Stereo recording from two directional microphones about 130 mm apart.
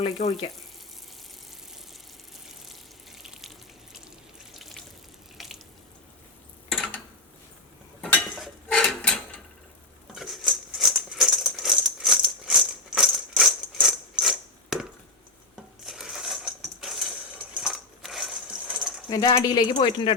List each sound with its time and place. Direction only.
0.2 s speech: 65° left (ahead or behind)
2.6 s water: centre (ahead or behind)
4.5 s water: centre (ahead or behind)
5.4 s sink: centre (ahead or behind)
6.7 s a sound: 5° left (ahead or behind)
8.0 s a sound: 5° left (ahead or behind)
10.1 s rattle: centre (ahead or behind)
15.9 s a sound: 5° right (ahead or behind)
19.4 s a woman's voice: 30° left (ahead or behind)